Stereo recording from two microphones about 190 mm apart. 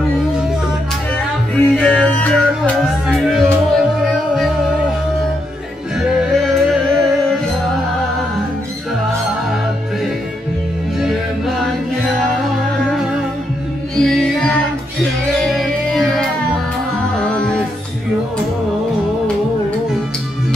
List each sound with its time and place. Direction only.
1.6 s music: 5° left (ahead or behind)
6.0 s music: centre (ahead or behind)
11.0 s music: centre (ahead or behind)
13.9 s music: 5° left (ahead or behind)